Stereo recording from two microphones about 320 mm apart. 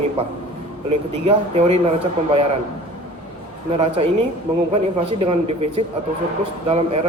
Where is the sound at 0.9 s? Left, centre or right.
Centre.